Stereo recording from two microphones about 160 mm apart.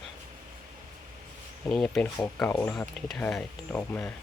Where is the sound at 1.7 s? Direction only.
5° left (ahead or behind).